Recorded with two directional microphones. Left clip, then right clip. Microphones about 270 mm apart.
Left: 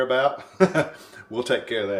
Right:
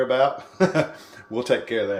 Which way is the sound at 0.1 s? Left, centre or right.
Centre.